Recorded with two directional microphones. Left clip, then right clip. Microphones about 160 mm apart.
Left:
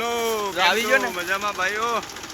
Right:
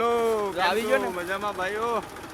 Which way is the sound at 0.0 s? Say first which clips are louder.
Right 1 dB; 80° right.